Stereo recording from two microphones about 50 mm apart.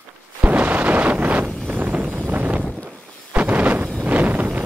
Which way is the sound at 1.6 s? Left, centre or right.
Right.